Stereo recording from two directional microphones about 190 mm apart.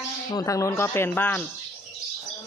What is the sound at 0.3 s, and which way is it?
Speech, 15° left (ahead or behind).